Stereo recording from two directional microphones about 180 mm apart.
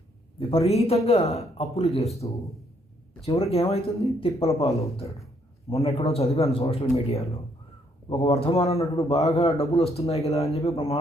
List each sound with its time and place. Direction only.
0.7 s speech: 35° left (ahead or behind)